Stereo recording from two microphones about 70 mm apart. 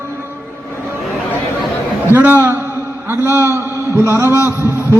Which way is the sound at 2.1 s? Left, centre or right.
Right.